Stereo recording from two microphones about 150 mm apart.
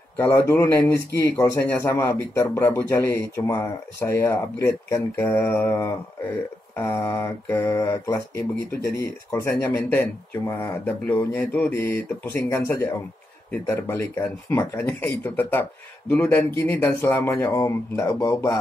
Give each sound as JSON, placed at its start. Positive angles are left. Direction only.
{"t": 0.2, "sound": "speech", "side_deg": 15}
{"t": 6.7, "sound": "mantra", "side_deg": 15}
{"t": 8.8, "sound": "speech", "side_deg": 90}
{"t": 9.3, "sound": "speech", "side_deg": 15}
{"t": 17.6, "sound": "mantra", "side_deg": 20}